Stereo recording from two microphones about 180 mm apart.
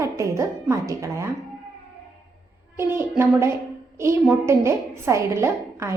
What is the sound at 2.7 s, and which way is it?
A woman's voice, 15° right (ahead or behind).